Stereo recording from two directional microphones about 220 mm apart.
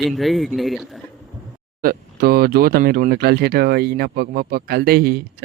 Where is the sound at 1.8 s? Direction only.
45° right (ahead or behind).